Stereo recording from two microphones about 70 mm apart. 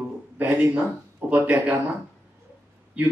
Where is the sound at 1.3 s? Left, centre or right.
Right.